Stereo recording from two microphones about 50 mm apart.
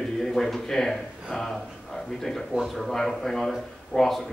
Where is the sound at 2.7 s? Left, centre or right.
Centre.